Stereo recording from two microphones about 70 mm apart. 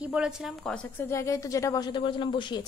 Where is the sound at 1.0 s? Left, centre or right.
Left.